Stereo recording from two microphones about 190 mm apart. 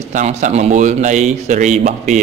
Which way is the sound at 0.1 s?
40° right (ahead or behind).